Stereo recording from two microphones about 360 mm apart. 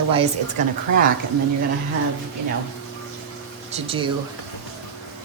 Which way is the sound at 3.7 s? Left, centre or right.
Centre.